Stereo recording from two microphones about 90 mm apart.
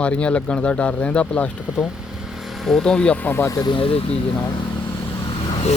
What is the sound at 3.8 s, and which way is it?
Speech, 90° left.